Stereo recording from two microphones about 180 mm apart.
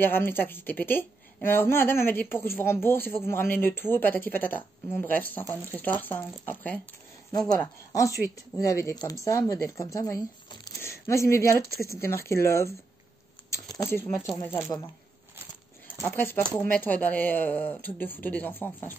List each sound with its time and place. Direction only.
0.0 s speech: 10° left (ahead or behind)
16.1 s speech: 10° left (ahead or behind)